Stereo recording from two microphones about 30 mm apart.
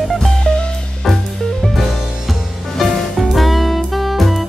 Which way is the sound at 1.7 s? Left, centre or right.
Centre.